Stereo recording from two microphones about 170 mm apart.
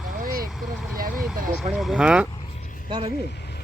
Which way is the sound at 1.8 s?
5° right (ahead or behind).